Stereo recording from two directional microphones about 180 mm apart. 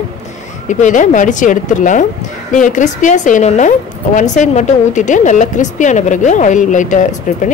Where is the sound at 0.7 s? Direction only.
45° left (ahead or behind).